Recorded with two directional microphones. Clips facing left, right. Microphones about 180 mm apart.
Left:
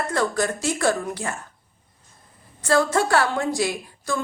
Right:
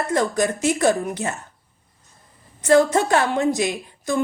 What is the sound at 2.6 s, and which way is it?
A woman's voice, 20° right (ahead or behind).